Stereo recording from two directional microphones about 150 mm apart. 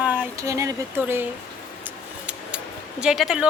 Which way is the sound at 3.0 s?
5° right (ahead or behind).